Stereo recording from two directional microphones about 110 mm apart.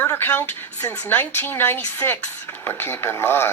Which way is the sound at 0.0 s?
20° left (ahead or behind).